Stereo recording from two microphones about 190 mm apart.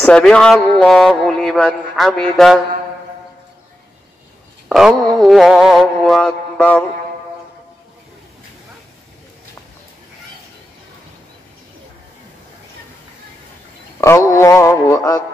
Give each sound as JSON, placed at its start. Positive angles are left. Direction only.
{"t": 0.0, "sound": "speech", "side_deg": 5}
{"t": 4.6, "sound": "speech", "side_deg": 0}
{"t": 14.0, "sound": "a sound", "side_deg": 15}